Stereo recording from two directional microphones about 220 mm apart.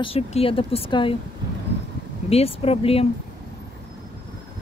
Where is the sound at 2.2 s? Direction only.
25° left (ahead or behind).